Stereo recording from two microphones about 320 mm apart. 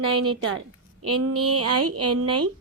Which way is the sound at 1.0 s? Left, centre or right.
Right.